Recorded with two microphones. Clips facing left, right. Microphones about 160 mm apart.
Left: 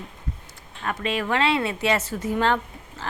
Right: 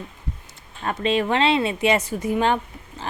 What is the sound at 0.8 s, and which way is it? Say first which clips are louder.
A woman's voice: right 4 dB; 25° right (ahead or behind).